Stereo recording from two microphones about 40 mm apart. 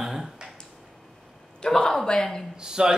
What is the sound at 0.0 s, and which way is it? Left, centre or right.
Finger snapping, centre.